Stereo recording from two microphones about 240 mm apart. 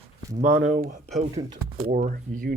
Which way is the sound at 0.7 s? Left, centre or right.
Right.